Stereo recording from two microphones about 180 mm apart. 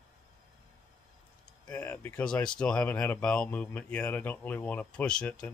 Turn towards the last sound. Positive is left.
turn(degrees=5)  # may be behind; listen again after turning